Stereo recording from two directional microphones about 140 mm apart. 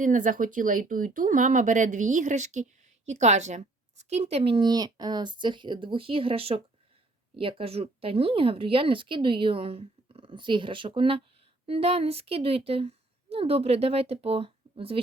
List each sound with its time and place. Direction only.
0.0 s a woman's voice: 70° right (ahead or behind); by 15.0 s 40° right (ahead or behind)